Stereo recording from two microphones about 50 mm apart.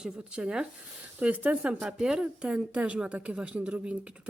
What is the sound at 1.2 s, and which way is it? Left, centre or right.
Speech, right.